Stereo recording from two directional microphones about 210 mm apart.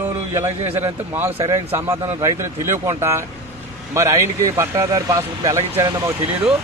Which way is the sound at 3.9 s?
15° right (ahead or behind).